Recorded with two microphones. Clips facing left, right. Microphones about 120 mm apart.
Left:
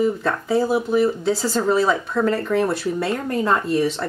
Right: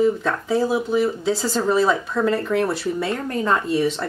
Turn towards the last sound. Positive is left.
turn(degrees=0)  # may be behind; listen again after turning